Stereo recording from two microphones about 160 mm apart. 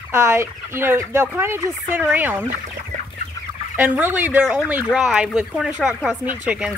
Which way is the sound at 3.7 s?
10° right (ahead or behind).